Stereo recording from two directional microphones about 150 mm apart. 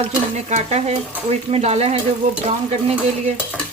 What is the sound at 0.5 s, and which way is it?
Stir, 45° right (ahead or behind).